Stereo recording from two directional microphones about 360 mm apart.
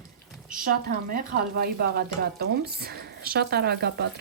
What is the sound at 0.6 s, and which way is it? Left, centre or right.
Speech, right.